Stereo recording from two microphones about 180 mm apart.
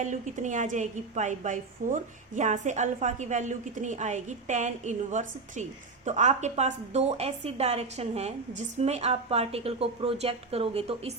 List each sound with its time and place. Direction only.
0.0 s a woman's voice: 45° right (ahead or behind)